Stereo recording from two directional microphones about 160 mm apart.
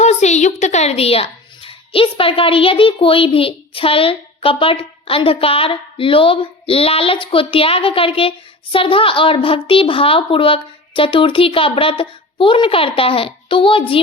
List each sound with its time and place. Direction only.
0.0 s speech: 45° left (ahead or behind)